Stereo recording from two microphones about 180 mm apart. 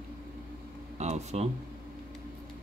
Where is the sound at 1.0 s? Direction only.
40° right (ahead or behind).